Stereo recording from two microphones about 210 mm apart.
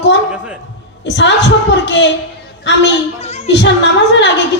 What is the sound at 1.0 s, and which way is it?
Music, 55° left (ahead or behind).